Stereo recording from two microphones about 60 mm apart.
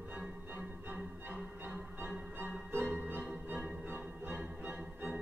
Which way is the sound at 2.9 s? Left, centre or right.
Right.